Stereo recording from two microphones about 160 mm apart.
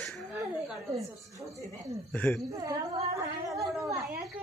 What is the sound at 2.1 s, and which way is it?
Speech, 10° left (ahead or behind).